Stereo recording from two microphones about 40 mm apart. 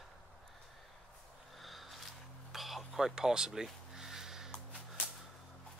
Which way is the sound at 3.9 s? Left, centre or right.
Centre.